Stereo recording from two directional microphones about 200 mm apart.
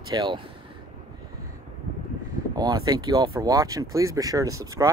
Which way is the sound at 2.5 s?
20° right (ahead or behind).